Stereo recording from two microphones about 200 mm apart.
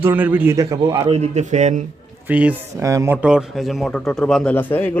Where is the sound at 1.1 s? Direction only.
35° right (ahead or behind).